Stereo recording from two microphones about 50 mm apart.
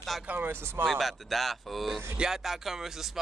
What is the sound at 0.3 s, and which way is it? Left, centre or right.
Speech, right.